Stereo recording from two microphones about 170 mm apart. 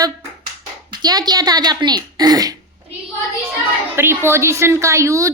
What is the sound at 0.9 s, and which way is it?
A woman's voice, 25° right (ahead or behind).